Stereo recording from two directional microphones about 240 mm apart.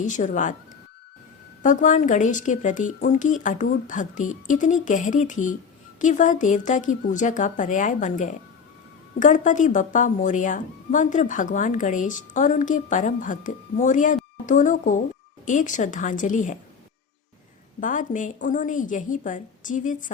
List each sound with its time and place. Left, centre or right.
0.0 s speech: left
1.6 s speech: left
17.7 s speech: left